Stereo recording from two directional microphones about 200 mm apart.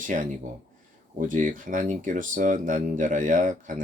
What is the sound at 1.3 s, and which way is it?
Speech, 40° right (ahead or behind).